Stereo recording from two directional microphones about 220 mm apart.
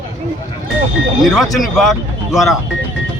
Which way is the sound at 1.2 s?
Centre (ahead or behind).